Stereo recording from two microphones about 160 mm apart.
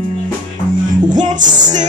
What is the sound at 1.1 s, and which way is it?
Music, 50° right (ahead or behind).